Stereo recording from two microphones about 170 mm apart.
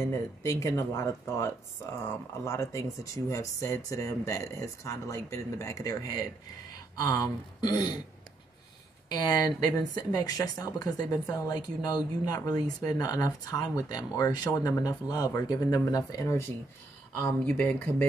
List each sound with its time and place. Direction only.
0.0 s a woman's voice: 15° left (ahead or behind)
9.1 s a woman's voice: 25° left (ahead or behind)